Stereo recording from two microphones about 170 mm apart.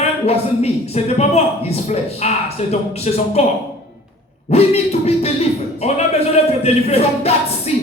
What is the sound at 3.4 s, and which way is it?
A man's voice, 40° left (ahead or behind).